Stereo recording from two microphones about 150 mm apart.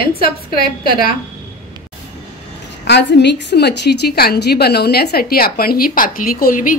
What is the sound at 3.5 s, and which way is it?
A woman's voice, 90° left.